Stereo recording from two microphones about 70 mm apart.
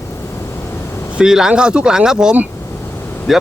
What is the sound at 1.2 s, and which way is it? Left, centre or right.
Speech, centre.